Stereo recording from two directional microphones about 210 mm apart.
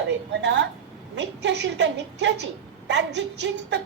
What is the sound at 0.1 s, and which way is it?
A woman's voice, 60° right (ahead or behind).